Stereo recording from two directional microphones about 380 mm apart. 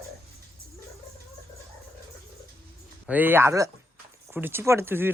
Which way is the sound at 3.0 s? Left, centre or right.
Centre.